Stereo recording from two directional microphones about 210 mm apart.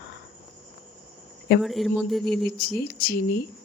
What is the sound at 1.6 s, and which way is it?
Speech, centre (ahead or behind).